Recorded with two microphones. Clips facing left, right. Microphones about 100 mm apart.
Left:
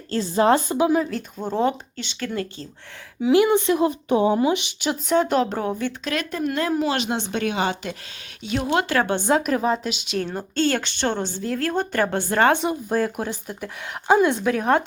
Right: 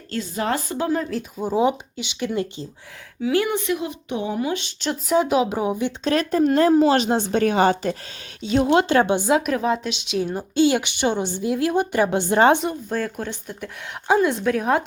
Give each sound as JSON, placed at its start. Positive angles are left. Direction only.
{"t": 0.1, "sound": "a woman's voice", "side_deg": 30}
{"t": 1.1, "sound": "speech", "side_deg": -5}
{"t": 3.2, "sound": "a woman's voice", "side_deg": 20}
{"t": 3.8, "sound": "speech", "side_deg": 40}
{"t": 4.5, "sound": "speech", "side_deg": 15}
{"t": 4.9, "sound": "speech", "side_deg": -5}
{"t": 6.1, "sound": "speech", "side_deg": -35}
{"t": 8.4, "sound": "speech", "side_deg": -30}
{"t": 9.1, "sound": "speech", "side_deg": -5}
{"t": 12.6, "sound": "speech", "side_deg": 10}